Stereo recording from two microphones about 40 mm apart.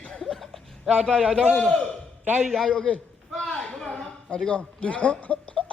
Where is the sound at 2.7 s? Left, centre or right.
Left.